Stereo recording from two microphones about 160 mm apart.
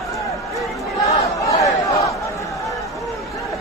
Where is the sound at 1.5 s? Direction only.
20° left (ahead or behind).